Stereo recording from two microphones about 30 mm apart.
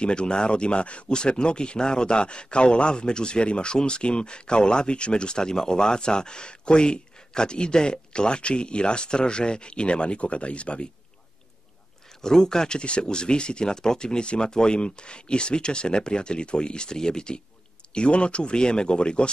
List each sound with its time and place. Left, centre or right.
0.0 s speech: left
12.2 s speech: centre
17.9 s speech: left